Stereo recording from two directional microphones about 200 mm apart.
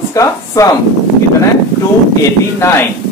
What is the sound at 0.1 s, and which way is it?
Speech, 15° left (ahead or behind).